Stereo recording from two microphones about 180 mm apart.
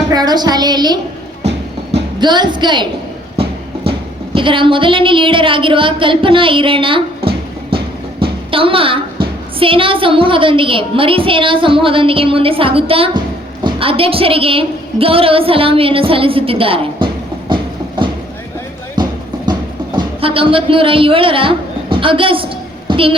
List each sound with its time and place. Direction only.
0.1 s a woman's voice: 20° right (ahead or behind)
2.1 s a woman's voice: 25° right (ahead or behind)
4.4 s a woman's voice: 30° right (ahead or behind)
8.2 s a sound: 30° right (ahead or behind)
9.6 s a woman's voice: 30° right (ahead or behind)
19.0 s music: 25° right (ahead or behind)
20.0 s speech: 30° right (ahead or behind)
22.9 s a sound: 30° right (ahead or behind)